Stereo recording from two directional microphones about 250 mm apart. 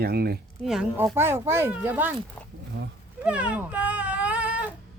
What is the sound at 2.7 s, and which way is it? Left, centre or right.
Speech, right.